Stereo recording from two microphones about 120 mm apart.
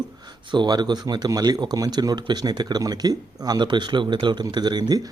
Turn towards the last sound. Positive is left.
turn(degrees=-35)  # may be behind; listen again after turning